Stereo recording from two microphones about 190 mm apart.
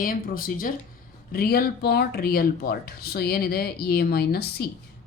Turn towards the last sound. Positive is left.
turn(degrees=55)  # may be behind; listen again after turning